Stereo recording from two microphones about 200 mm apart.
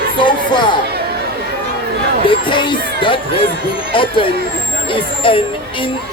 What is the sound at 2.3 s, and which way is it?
Speech, 25° left (ahead or behind).